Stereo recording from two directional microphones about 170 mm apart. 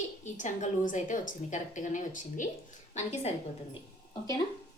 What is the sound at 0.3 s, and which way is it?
A woman's voice, 45° left (ahead or behind).